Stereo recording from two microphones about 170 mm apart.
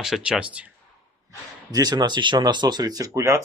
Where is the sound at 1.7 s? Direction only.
25° right (ahead or behind).